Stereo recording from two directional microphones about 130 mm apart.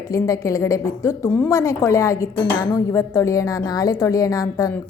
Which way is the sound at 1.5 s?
25° left (ahead or behind).